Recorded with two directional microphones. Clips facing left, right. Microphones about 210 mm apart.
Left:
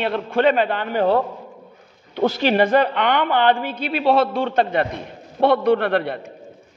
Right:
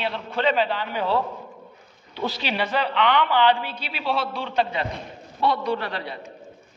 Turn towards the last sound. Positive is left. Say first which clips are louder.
# left 10 dB
turn(degrees=60)  # may be behind; listen again after turning